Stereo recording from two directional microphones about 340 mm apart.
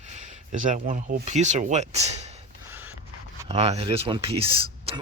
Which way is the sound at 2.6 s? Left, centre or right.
Centre.